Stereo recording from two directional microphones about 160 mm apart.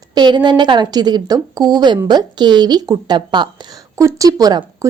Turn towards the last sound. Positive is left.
turn(degrees=-25)  # may be behind; listen again after turning